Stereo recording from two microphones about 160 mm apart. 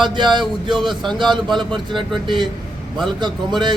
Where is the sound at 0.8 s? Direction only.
Centre (ahead or behind).